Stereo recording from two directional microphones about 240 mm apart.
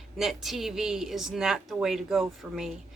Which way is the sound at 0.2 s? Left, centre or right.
Centre.